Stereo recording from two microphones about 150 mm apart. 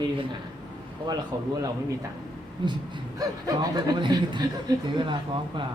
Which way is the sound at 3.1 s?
25° right (ahead or behind).